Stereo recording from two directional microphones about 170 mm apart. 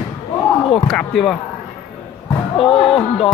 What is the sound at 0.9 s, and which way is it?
Speech, centre (ahead or behind).